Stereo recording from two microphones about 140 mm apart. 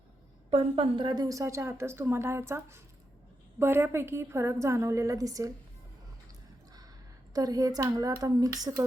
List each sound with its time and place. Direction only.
0.5 s a woman's voice: 40° right (ahead or behind)
7.3 s a woman's voice: 25° right (ahead or behind)